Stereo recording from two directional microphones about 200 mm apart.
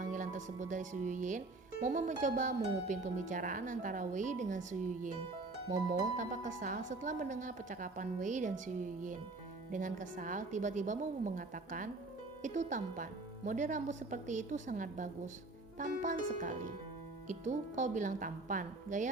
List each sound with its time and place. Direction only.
0.0 s speech: 40° right (ahead or behind)
1.8 s harp: 35° right (ahead or behind)